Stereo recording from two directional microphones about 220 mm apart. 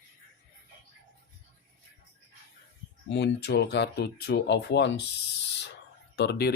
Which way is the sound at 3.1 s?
50° left (ahead or behind).